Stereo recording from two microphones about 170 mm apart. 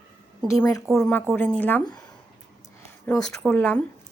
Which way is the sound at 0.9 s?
5° left (ahead or behind).